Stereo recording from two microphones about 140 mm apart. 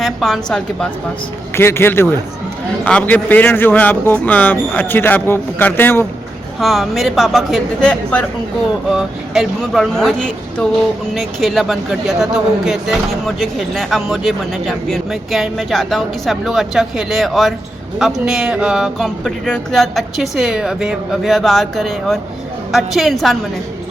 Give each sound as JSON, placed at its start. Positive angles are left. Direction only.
{"t": 0.0, "sound": "speech", "side_deg": 5}
{"t": 1.5, "sound": "a man's voice", "side_deg": 15}
{"t": 6.6, "sound": "speech", "side_deg": 0}
{"t": 8.9, "sound": "speech", "side_deg": -5}